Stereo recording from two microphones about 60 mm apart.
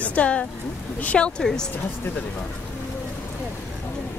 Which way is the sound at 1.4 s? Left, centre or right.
Centre.